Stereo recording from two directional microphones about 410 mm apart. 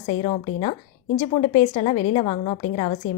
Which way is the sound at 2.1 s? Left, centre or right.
Centre.